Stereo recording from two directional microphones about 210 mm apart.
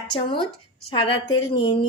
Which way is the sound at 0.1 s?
20° left (ahead or behind).